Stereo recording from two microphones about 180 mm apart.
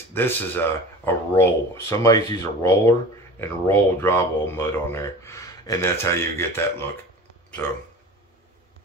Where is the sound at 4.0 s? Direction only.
15° left (ahead or behind).